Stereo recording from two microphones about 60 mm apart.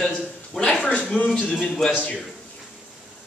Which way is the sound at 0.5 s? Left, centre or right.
Centre.